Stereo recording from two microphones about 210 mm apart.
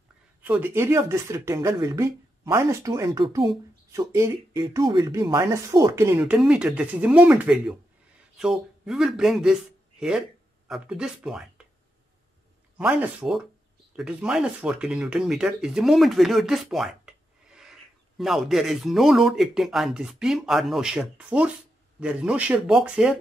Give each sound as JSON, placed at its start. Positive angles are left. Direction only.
{"t": 0.4, "sound": "speech", "side_deg": -10}
{"t": 12.7, "sound": "speech", "side_deg": -5}